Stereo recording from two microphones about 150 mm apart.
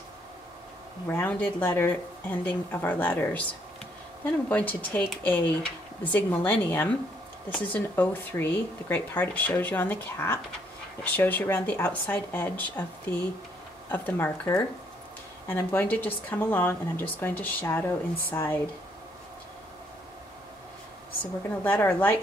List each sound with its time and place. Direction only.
1.0 s speech: 15° left (ahead or behind)
21.6 s speech: 15° left (ahead or behind)